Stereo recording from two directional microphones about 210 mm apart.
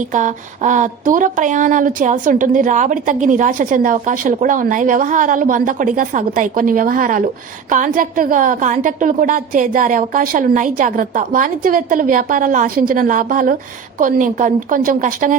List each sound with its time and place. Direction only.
0.1 s speech: 35° right (ahead or behind)